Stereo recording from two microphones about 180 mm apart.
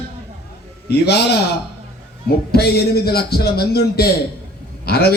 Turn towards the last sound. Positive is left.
turn(degrees=60)  # may be behind; listen again after turning